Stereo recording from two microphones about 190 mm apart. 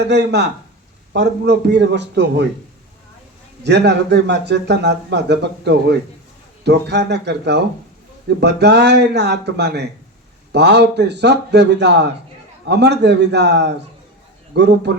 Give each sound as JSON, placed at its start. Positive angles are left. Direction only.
{"t": 0.1, "sound": "speech", "side_deg": -60}
{"t": 3.6, "sound": "speech", "side_deg": -65}